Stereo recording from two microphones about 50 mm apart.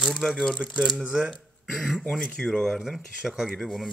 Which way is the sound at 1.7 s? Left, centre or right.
Centre.